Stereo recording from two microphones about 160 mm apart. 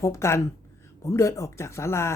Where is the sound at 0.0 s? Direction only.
15° left (ahead or behind).